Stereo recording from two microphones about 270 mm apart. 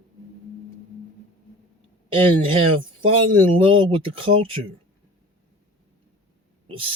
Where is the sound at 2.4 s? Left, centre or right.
Centre.